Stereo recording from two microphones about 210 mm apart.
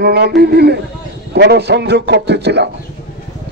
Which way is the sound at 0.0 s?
50° right (ahead or behind).